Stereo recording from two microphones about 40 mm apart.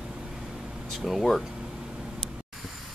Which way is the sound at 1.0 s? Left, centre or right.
Centre.